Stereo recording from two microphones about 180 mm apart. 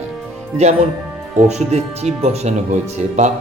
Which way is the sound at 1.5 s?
40° right (ahead or behind).